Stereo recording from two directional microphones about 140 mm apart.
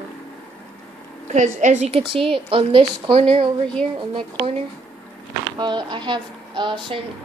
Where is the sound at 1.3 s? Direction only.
60° right (ahead or behind); by 4.5 s 35° right (ahead or behind).